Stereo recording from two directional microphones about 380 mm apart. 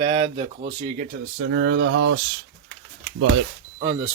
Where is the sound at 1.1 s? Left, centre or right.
Right.